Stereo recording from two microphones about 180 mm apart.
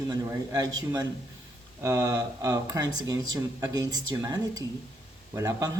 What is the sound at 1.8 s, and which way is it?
Speech, 20° right (ahead or behind).